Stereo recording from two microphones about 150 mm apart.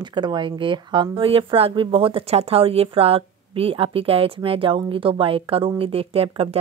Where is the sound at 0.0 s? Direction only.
30° right (ahead or behind).